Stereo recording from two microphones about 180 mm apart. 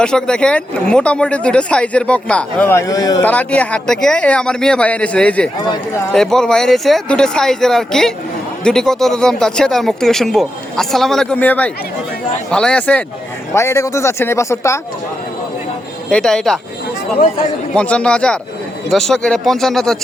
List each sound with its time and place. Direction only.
0.0 s speech: 5° left (ahead or behind); by 3.2 s 20° left (ahead or behind)
3.2 s speech: 10° left (ahead or behind)
16.0 s speech: 5° left (ahead or behind)
17.7 s speech: 5° left (ahead or behind)